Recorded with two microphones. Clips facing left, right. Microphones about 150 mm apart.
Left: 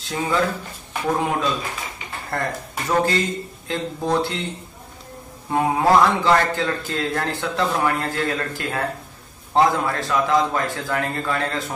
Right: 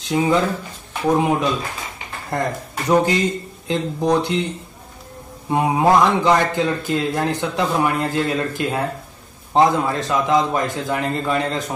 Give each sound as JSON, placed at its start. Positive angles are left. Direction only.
{"t": 0.0, "sound": "a man's voice", "side_deg": -20}
{"t": 5.5, "sound": "a man's voice", "side_deg": -20}